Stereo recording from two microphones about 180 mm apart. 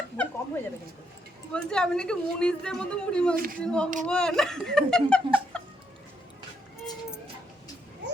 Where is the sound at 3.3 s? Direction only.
55° right (ahead or behind).